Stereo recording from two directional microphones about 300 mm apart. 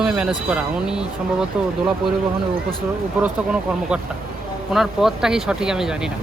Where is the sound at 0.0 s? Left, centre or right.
Centre.